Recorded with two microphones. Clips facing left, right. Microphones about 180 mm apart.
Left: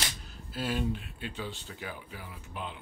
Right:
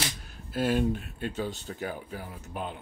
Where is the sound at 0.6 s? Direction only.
50° right (ahead or behind).